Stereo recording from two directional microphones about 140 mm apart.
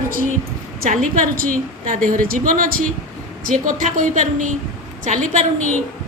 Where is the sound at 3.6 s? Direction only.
70° right (ahead or behind).